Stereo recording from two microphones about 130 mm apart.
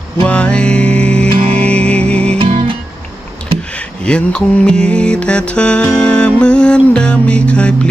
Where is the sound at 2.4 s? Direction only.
40° right (ahead or behind).